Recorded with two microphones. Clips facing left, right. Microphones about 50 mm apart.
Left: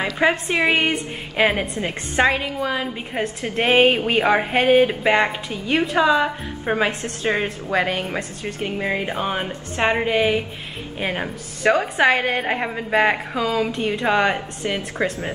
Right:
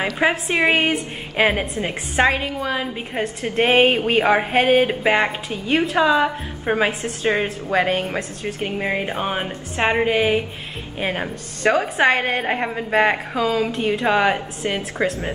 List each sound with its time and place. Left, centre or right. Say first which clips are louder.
0.0 s a woman's voice: even; centre
8.5 s a woman's voice: even; centre